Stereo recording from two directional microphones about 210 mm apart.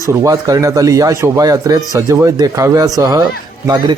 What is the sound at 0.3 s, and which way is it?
A man's voice, 15° right (ahead or behind).